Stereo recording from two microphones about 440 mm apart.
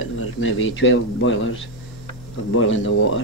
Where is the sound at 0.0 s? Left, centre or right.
Left.